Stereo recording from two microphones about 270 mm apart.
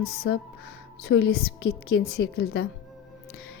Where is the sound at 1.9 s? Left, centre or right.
Left.